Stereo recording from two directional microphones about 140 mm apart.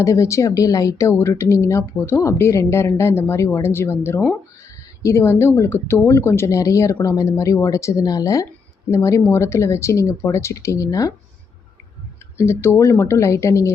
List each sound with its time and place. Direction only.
0.0 s a woman's voice: 20° left (ahead or behind)
12.6 s a woman's voice: 15° left (ahead or behind)